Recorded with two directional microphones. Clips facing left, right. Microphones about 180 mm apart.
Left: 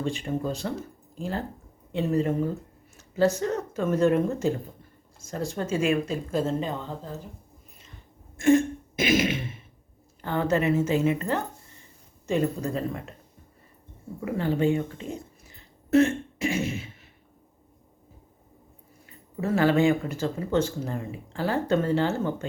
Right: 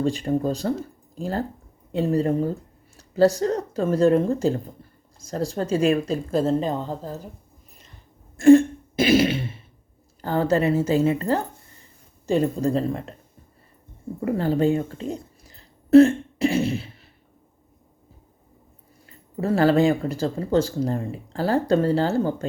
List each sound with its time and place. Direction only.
0.0 s speech: 35° right (ahead or behind)
8.4 s throat clearing: 35° right (ahead or behind)
10.2 s speech: 35° right (ahead or behind)
14.2 s a woman's voice: 40° right (ahead or behind)
19.4 s speech: 35° right (ahead or behind)